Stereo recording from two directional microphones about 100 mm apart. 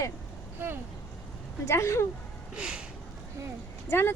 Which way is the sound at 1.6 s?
25° left (ahead or behind).